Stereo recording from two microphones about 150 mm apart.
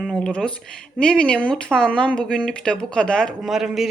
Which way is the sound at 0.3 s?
5° left (ahead or behind).